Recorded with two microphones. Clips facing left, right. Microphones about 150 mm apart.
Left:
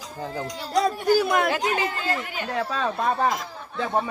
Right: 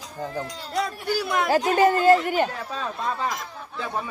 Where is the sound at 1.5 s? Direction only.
45° right (ahead or behind).